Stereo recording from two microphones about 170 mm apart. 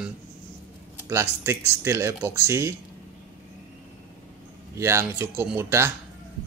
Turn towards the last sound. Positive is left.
turn(degrees=-15)  # may be behind; listen again after turning